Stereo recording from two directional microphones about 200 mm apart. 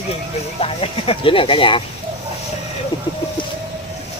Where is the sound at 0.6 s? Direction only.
30° left (ahead or behind).